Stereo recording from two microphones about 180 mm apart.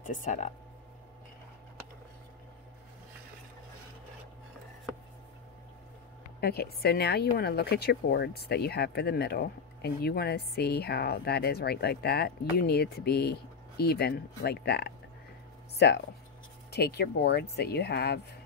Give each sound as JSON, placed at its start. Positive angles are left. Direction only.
{"t": 0.0, "sound": "speech", "side_deg": 45}
{"t": 6.4, "sound": "a woman's voice", "side_deg": 60}